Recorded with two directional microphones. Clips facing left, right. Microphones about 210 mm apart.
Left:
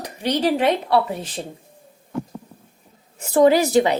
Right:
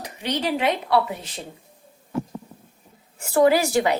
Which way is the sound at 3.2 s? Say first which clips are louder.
Left 3 dB; 20° left (ahead or behind).